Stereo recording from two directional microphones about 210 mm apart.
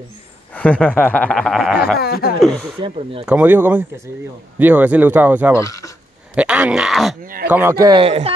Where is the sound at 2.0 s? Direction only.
45° left (ahead or behind).